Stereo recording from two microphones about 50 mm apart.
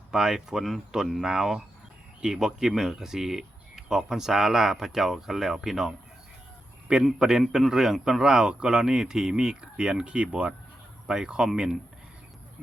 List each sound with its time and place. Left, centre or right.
0.1 s speech: centre
7.0 s speech: centre